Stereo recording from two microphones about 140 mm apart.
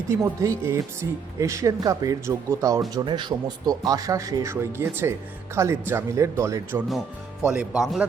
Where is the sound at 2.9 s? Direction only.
35° right (ahead or behind); by 6.8 s 20° right (ahead or behind).